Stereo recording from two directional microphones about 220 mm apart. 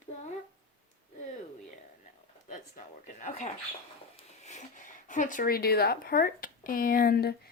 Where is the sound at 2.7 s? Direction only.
35° left (ahead or behind).